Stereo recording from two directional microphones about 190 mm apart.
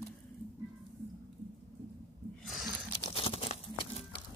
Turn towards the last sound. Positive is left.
turn(degrees=30)  # may be behind; listen again after turning